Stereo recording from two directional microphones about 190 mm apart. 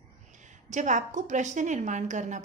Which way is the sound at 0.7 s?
40° right (ahead or behind).